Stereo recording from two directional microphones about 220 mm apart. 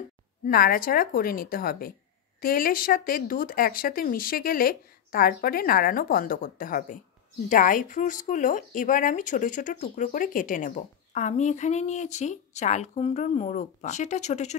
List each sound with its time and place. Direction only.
0.5 s speech: 40° left (ahead or behind)